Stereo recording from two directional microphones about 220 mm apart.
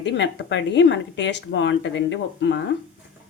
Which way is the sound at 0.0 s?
55° left (ahead or behind).